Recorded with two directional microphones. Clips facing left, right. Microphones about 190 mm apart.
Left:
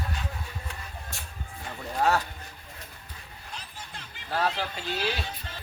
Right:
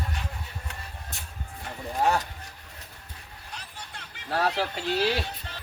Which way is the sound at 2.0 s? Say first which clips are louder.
Even; 15° right (ahead or behind).